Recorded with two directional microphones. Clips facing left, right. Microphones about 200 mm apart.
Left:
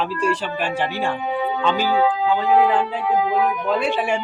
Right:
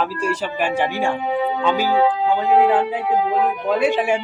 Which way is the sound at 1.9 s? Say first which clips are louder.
Right 1 dB; 25° right (ahead or behind).